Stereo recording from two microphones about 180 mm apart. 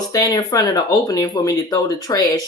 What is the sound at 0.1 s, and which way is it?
Speech, 20° left (ahead or behind).